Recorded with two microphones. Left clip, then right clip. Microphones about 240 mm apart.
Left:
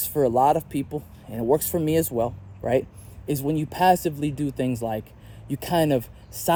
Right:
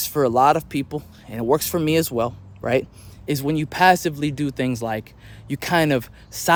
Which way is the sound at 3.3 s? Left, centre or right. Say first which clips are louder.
Right 3 dB; centre.